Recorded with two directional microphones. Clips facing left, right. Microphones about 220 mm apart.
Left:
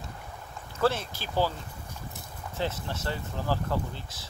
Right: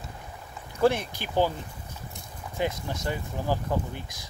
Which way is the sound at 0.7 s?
15° right (ahead or behind).